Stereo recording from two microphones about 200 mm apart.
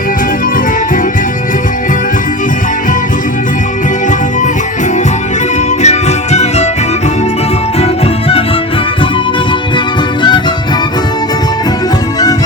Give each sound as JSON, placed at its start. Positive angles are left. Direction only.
{"t": 5.8, "sound": "music", "side_deg": 35}